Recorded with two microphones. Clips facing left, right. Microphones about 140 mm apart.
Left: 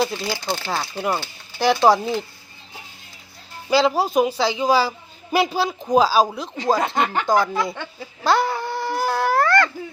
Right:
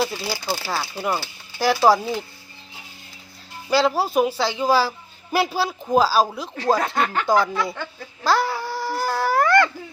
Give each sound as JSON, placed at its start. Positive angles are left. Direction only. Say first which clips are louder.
{"t": 0.0, "sound": "a man's voice", "louder": "left 2 dB", "side_deg": -5}
{"t": 3.7, "sound": "a man's voice", "louder": "left 1 dB", "side_deg": 0}
{"t": 6.6, "sound": "speech", "louder": "left 1 dB", "side_deg": 15}
{"t": 8.2, "sound": "baby cry", "louder": "left 1 dB", "side_deg": 0}
{"t": 9.3, "sound": "a sound", "louder": "right 2 dB", "side_deg": -15}